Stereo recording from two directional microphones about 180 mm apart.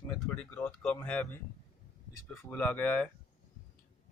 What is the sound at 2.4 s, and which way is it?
Speech, 10° left (ahead or behind).